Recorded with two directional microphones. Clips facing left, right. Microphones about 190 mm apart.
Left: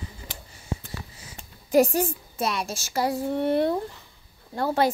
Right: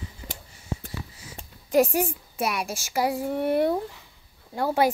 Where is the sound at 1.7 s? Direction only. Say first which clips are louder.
Left 1 dB; centre (ahead or behind).